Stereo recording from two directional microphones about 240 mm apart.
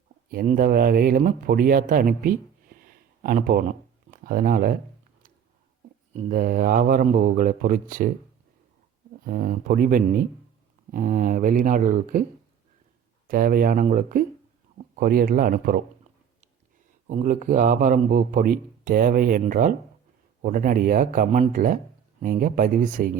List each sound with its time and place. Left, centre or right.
0.3 s speech: right
6.1 s speech: right
9.2 s speech: right
13.2 s speech: right
17.1 s speech: right